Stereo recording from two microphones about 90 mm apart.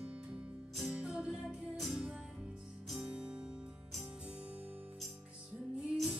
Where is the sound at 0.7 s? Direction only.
5° right (ahead or behind).